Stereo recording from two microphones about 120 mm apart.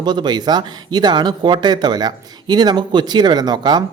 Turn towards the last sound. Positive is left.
turn(degrees=-35)  # may be behind; listen again after turning